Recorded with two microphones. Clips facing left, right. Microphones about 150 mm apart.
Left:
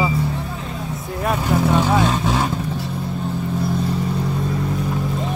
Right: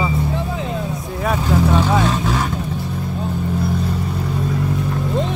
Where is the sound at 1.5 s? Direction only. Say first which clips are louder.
Right 1 dB; 15° left (ahead or behind).